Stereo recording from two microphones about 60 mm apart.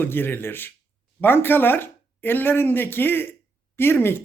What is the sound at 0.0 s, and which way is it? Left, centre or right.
Speech, left.